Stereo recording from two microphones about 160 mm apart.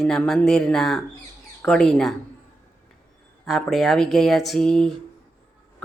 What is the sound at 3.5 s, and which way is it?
Speech, centre (ahead or behind).